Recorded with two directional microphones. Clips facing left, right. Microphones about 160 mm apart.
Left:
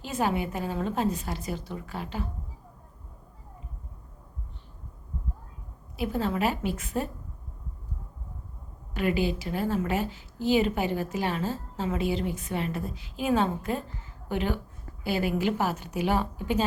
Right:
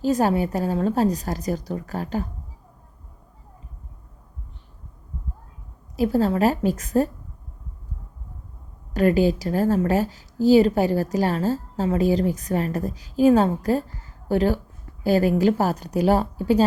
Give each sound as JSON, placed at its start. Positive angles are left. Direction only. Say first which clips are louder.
{"t": 0.0, "sound": "a woman's voice", "louder": "right 8 dB", "side_deg": -40}
{"t": 6.0, "sound": "a woman's voice", "louder": "right 8 dB", "side_deg": -40}
{"t": 8.9, "sound": "a woman's voice", "louder": "right 8 dB", "side_deg": -40}